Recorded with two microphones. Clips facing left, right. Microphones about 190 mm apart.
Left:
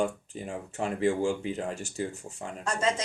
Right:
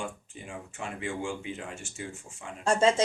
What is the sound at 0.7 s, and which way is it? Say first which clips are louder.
Speech: left 9 dB; 35° left (ahead or behind).